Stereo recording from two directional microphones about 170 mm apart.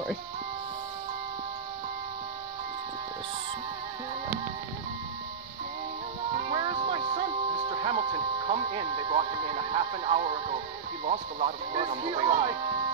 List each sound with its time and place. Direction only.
6.5 s music: 30° right (ahead or behind)